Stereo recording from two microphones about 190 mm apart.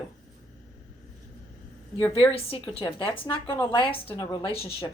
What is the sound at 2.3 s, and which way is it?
Speech, 30° left (ahead or behind).